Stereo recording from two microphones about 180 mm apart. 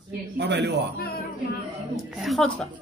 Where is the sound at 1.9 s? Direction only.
Centre (ahead or behind).